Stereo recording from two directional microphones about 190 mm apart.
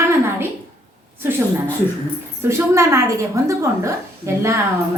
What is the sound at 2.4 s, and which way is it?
A woman's voice, 15° right (ahead or behind).